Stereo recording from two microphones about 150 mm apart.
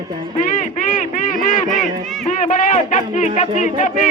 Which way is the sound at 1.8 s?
60° left (ahead or behind).